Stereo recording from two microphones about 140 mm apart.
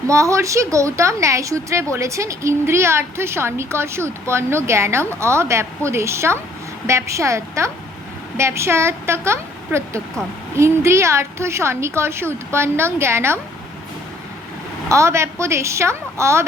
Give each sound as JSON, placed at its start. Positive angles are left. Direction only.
{"t": 0.1, "sound": "a woman's voice", "side_deg": -20}
{"t": 14.8, "sound": "a woman's voice", "side_deg": -20}